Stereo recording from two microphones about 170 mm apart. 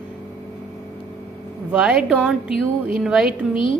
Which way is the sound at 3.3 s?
30° left (ahead or behind).